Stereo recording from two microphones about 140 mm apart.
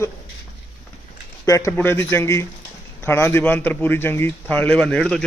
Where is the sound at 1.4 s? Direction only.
25° left (ahead or behind).